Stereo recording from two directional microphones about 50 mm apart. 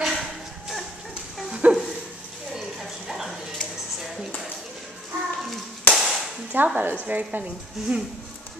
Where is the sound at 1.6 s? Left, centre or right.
Right.